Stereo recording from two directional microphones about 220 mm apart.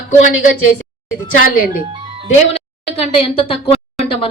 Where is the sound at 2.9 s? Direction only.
25° left (ahead or behind).